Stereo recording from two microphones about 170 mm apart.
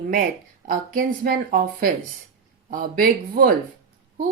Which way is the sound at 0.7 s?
55° right (ahead or behind).